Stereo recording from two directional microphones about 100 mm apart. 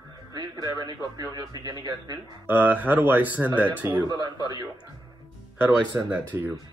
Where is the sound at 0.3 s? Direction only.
45° right (ahead or behind).